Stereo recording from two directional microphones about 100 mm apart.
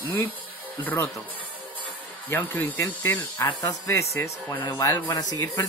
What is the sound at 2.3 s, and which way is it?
Speech, 20° left (ahead or behind).